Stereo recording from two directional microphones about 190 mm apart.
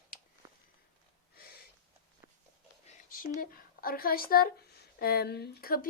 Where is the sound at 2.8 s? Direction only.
45° left (ahead or behind).